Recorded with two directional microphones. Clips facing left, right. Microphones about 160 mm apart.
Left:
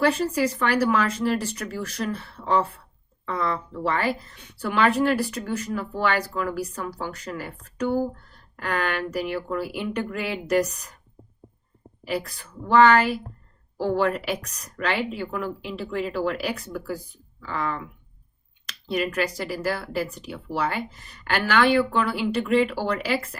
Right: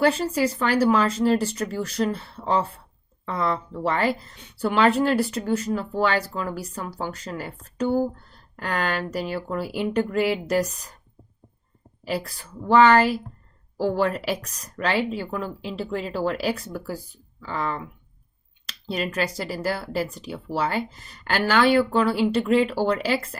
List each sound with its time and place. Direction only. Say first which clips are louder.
0.0 s speech: right 1 dB; 30° right (ahead or behind)
12.6 s speech: right 1 dB; 35° right (ahead or behind)